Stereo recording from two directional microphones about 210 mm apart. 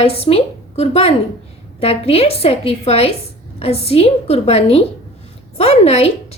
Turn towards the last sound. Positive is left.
turn(degrees=30)  # may be behind; listen again after turning